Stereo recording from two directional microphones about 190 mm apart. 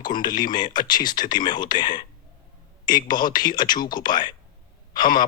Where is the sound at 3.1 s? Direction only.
20° left (ahead or behind).